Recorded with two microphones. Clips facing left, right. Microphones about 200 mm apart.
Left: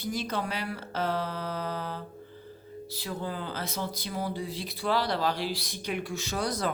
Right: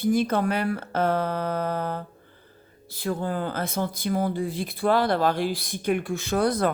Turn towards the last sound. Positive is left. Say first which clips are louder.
# right 8 dB
turn(degrees=-55)  # may be behind; listen again after turning